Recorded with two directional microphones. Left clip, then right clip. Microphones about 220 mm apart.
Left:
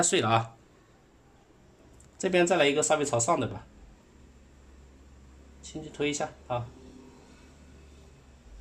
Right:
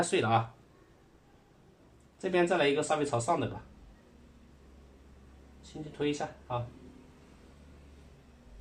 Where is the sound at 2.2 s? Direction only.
35° left (ahead or behind).